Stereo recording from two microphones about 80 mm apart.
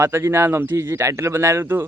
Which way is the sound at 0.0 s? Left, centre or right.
Right.